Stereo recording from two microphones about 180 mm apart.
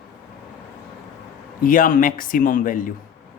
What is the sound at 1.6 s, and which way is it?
Speech, 50° left (ahead or behind).